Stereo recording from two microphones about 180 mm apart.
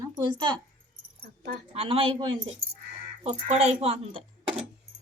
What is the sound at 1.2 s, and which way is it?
Keys jangling, 60° right (ahead or behind).